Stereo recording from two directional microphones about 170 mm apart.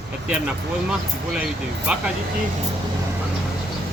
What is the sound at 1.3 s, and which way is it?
Speech, 5° right (ahead or behind).